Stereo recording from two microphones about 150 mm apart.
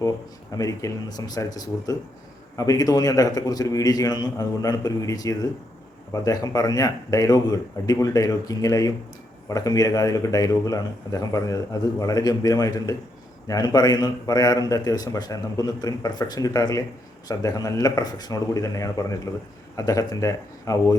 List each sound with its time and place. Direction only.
0.5 s speech: 25° left (ahead or behind)